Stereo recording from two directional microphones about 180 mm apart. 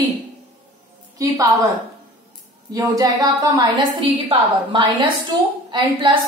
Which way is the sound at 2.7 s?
20° right (ahead or behind).